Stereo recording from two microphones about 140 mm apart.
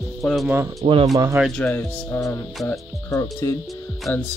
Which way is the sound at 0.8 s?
45° right (ahead or behind).